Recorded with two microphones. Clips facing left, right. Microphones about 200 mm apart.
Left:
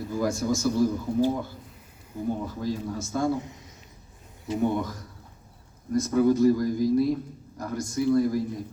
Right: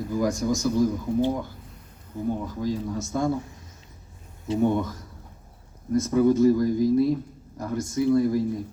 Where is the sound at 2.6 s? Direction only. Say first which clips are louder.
Right 2 dB; 20° right (ahead or behind).